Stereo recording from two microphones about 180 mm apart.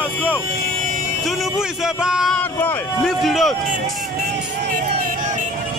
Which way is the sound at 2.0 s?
5° right (ahead or behind).